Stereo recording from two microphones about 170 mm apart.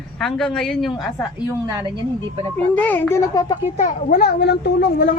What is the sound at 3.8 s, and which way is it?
Speech, 45° left (ahead or behind).